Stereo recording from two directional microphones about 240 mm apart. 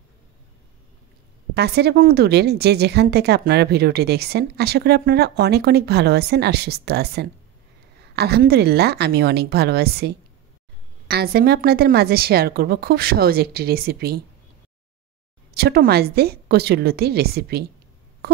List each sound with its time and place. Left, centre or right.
1.5 s a woman's voice: right
15.5 s a woman's voice: right
18.2 s busy signal: right